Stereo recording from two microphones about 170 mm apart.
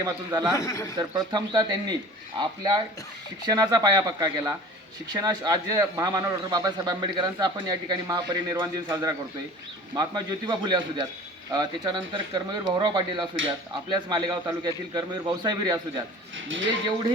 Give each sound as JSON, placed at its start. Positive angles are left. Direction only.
{"t": 0.0, "sound": "a man's voice", "side_deg": -25}
{"t": 0.5, "sound": "a man's voice", "side_deg": 15}
{"t": 0.9, "sound": "a man's voice", "side_deg": -25}